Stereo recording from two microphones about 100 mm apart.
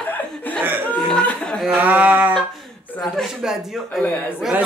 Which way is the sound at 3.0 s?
Centre (ahead or behind).